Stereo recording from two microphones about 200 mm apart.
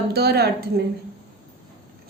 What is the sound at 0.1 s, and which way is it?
Speech, 50° right (ahead or behind).